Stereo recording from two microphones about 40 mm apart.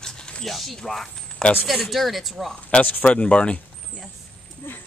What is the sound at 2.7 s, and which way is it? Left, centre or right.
Speech, left.